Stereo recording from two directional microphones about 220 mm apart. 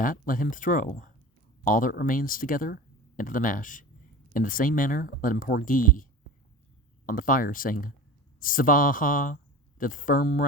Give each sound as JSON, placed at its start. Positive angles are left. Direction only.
{"t": 0.0, "sound": "speech", "side_deg": 40}